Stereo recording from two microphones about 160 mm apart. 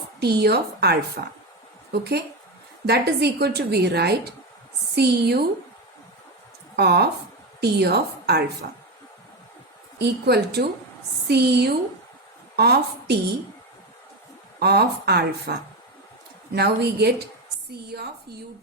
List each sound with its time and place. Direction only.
0.2 s a woman's voice: 90° right
6.7 s a woman's voice: 90° right
10.0 s a woman's voice: 90° right
14.6 s a woman's voice: 90° right
16.6 s a woman's voice: 90° right